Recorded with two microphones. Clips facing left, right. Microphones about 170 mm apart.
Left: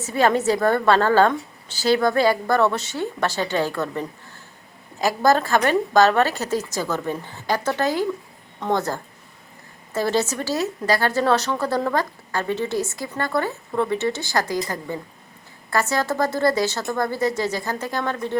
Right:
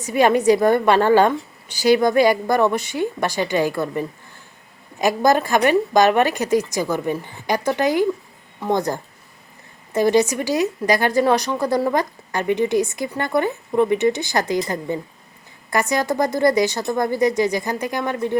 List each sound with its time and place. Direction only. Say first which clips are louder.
0.0 s speech: right 3 dB; 15° right (ahead or behind)